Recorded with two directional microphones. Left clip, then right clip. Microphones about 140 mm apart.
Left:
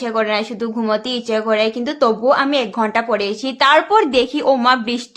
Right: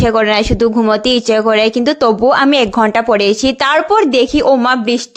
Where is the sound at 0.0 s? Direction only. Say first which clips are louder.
Right 7 dB; 75° right (ahead or behind).